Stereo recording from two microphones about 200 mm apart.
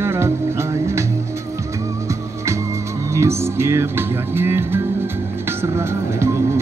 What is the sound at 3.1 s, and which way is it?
Music, 15° right (ahead or behind).